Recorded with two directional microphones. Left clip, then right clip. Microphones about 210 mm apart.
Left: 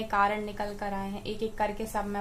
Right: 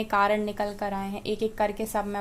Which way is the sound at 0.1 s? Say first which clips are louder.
Right 3 dB; 50° right (ahead or behind).